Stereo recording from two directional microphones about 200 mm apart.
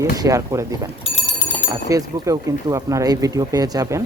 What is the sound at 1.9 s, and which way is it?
Speech, 15° right (ahead or behind).